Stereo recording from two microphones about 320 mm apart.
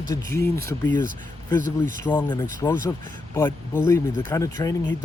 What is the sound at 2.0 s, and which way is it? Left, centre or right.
Speech, centre.